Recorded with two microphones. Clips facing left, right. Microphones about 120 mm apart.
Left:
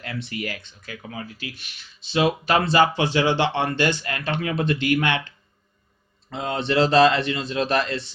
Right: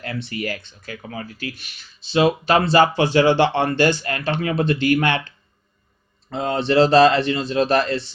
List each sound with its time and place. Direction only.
0.0 s speech: 35° right (ahead or behind)
1.0 s speech: 45° right (ahead or behind)
6.3 s speech: 35° right (ahead or behind)